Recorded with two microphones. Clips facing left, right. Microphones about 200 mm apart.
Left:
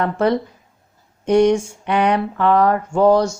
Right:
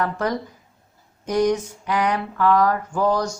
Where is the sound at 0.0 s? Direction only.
30° left (ahead or behind).